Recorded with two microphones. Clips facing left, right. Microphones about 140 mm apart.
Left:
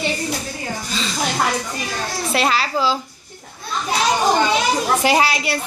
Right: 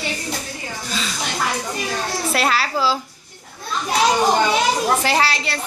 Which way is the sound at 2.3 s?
Centre (ahead or behind).